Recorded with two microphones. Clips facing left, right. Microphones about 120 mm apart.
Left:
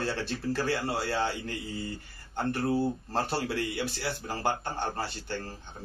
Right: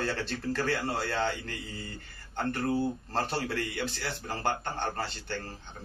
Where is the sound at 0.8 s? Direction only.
10° left (ahead or behind).